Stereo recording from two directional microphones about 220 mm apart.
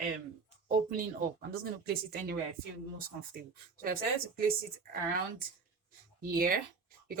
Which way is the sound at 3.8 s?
40° right (ahead or behind).